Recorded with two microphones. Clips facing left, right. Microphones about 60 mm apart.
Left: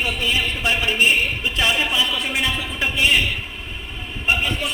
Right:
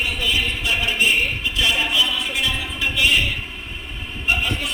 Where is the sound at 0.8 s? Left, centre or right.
Centre.